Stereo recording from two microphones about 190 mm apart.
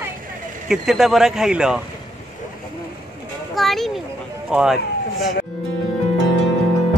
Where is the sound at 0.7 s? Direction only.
Centre (ahead or behind).